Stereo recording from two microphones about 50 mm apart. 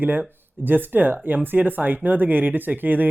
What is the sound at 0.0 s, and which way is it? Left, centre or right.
Speech, right.